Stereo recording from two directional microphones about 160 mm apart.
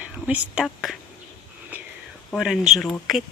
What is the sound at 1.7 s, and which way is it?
Whispering, 10° right (ahead or behind).